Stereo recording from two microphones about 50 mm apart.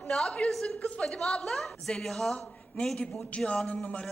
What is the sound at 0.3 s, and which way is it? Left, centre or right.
Speech, left.